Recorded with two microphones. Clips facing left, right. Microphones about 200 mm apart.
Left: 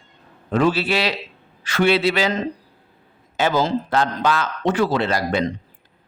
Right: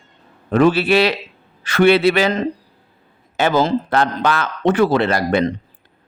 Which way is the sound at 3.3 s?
60° right (ahead or behind).